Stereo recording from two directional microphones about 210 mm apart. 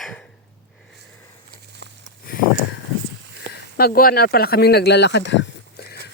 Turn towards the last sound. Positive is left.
turn(degrees=50)  # may be behind; listen again after turning